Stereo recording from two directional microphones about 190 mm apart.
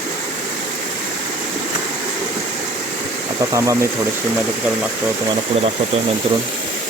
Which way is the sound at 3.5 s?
15° right (ahead or behind).